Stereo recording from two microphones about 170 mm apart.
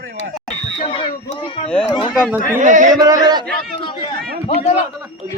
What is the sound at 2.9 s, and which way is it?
Speech, 20° right (ahead or behind).